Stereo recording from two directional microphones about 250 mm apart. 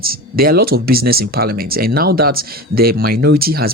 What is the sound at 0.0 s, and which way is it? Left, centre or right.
Speech, right.